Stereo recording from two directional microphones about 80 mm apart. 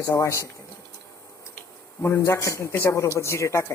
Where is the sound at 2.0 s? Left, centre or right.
Left.